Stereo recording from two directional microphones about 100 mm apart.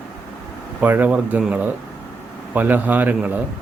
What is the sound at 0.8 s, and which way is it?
Speech, 15° right (ahead or behind).